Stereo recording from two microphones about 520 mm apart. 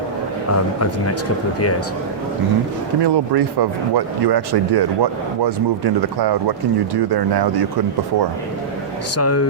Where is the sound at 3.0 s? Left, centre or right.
Right.